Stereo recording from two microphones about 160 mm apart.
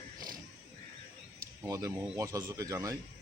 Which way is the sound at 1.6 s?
20° right (ahead or behind).